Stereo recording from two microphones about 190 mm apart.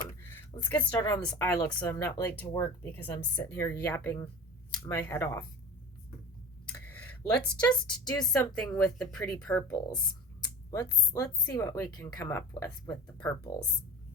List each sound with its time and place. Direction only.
0.6 s a woman's voice: 10° left (ahead or behind)
6.8 s a sound: 10° left (ahead or behind)
8.2 s speech: 5° left (ahead or behind)
10.7 s a woman's voice: 15° left (ahead or behind)